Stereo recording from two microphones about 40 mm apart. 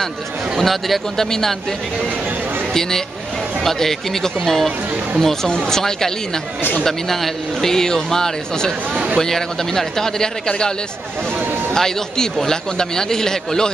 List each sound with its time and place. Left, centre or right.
0.6 s speech: centre
2.7 s a man's voice: centre
8.9 s speech: right
9.2 s a man's voice: centre
11.7 s a man's voice: centre